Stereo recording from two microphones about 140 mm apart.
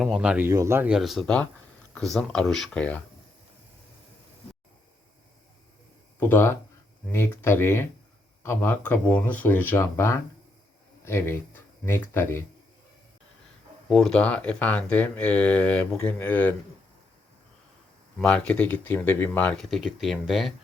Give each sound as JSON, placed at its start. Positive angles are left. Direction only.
{"t": 0.0, "sound": "speech", "side_deg": -5}
{"t": 0.9, "sound": "speech", "side_deg": 0}
{"t": 6.1, "sound": "speech", "side_deg": 15}
{"t": 13.9, "sound": "speech", "side_deg": 5}
{"t": 18.2, "sound": "speech", "side_deg": 5}